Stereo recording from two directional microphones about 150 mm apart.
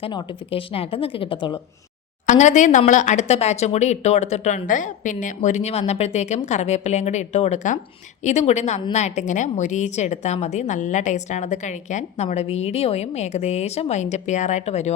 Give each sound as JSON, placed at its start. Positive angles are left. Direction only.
{"t": 0.0, "sound": "speech", "side_deg": 30}
{"t": 2.2, "sound": "speech", "side_deg": 55}